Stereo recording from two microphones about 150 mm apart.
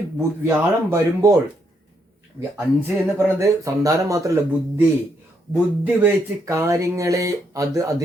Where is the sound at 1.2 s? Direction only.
20° right (ahead or behind).